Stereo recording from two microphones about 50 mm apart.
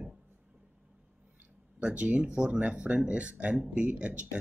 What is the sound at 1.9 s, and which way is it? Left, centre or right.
Speech, right.